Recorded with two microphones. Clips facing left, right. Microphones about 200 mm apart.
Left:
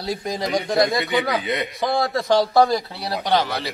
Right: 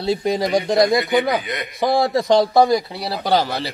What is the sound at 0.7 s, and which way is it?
Speech, 15° right (ahead or behind).